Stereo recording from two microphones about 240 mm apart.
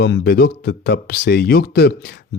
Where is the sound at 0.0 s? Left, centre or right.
Left.